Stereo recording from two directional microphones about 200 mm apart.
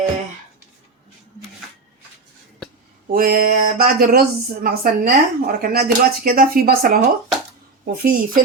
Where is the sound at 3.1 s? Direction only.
45° right (ahead or behind).